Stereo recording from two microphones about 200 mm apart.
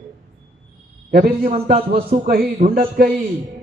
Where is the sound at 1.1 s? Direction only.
45° right (ahead or behind).